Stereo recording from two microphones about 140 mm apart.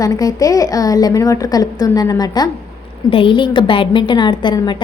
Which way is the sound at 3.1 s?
35° left (ahead or behind).